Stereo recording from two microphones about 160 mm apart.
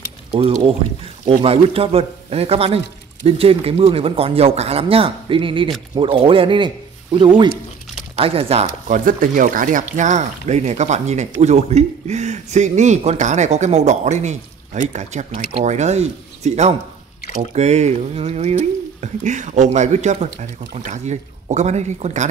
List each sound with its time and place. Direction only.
0.3 s speech: 35° right (ahead or behind)
8.8 s speech: 55° right (ahead or behind)